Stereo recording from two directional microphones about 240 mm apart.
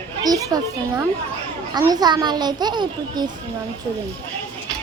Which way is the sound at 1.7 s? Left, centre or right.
Centre.